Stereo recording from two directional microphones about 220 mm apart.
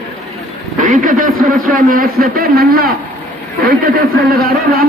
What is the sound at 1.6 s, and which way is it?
Speech, 40° right (ahead or behind).